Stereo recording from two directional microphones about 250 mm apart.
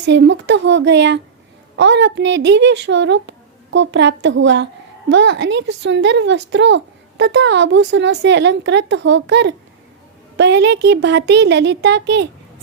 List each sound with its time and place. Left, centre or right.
0.0 s speech: right